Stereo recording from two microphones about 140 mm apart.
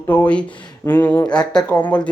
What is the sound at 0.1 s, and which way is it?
Speech, 10° left (ahead or behind).